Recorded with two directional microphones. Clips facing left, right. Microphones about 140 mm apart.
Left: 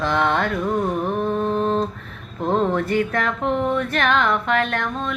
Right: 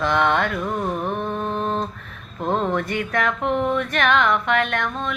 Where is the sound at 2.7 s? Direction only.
30° left (ahead or behind).